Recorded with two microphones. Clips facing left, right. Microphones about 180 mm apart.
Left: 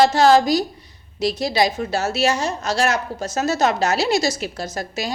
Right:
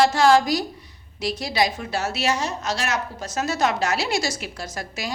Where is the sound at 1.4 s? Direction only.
25° left (ahead or behind).